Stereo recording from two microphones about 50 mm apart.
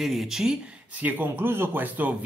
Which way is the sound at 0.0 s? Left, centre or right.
Centre.